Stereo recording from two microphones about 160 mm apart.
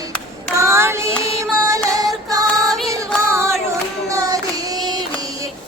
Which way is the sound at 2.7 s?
Centre (ahead or behind).